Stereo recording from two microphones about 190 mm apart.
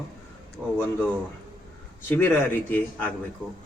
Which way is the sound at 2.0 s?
10° left (ahead or behind).